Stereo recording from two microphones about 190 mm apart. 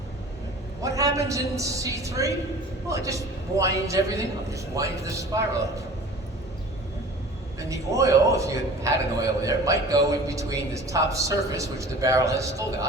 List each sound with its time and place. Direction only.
0.8 s a man's voice: 15° right (ahead or behind)
7.6 s a man's voice: 15° right (ahead or behind)